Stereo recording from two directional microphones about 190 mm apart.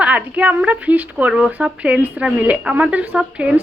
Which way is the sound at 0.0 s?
5° right (ahead or behind).